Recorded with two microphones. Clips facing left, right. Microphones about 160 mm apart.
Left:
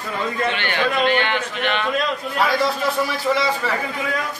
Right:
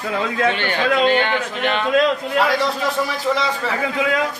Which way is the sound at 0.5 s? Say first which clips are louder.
Right 2 dB; 45° right (ahead or behind).